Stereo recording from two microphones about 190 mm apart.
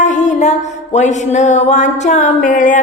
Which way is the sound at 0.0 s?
40° left (ahead or behind).